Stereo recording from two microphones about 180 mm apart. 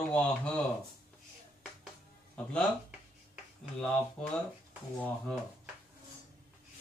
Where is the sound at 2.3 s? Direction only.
5° left (ahead or behind).